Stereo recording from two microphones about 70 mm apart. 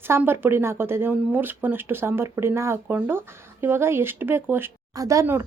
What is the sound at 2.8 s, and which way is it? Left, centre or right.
A woman's voice, right.